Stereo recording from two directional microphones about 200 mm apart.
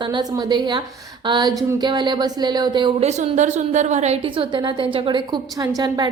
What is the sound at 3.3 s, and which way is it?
A woman's voice, 35° right (ahead or behind).